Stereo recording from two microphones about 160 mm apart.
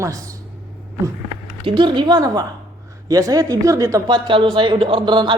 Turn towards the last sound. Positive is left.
turn(degrees=-30)  # may be behind; listen again after turning